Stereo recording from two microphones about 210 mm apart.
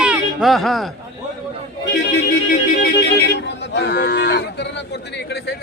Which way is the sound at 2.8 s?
50° left (ahead or behind).